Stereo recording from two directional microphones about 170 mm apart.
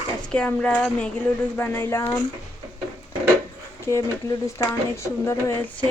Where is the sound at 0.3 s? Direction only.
5° left (ahead or behind).